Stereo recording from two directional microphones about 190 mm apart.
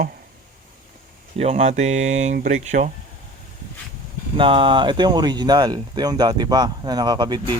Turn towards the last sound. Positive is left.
turn(degrees=-20)  # may be behind; listen again after turning